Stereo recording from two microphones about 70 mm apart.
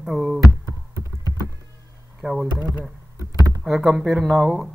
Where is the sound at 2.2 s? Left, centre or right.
Centre.